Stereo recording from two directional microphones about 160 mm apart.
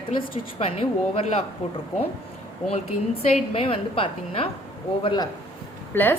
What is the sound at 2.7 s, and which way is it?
A woman's voice, 40° left (ahead or behind).